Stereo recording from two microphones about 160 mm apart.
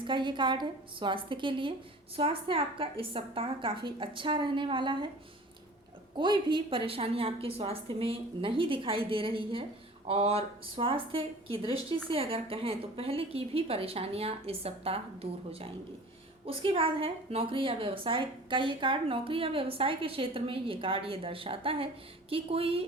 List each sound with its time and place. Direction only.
0.0 s a woman's voice: 30° right (ahead or behind)
6.1 s a woman's voice: 30° right (ahead or behind)